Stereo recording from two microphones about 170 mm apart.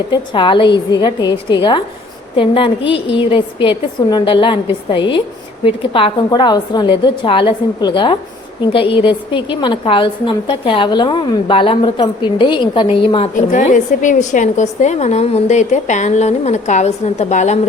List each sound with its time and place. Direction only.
0.1 s a woman's voice: 30° left (ahead or behind)
13.3 s a woman's voice: 45° left (ahead or behind)